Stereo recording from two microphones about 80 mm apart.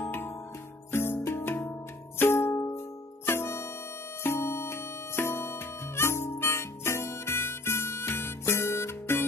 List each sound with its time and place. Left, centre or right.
0.0 s music: left